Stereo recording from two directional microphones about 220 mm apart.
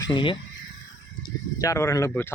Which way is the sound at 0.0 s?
20° left (ahead or behind).